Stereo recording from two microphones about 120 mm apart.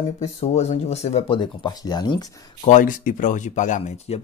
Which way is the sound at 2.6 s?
90° left.